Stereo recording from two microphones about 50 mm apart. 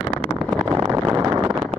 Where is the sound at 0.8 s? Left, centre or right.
Right.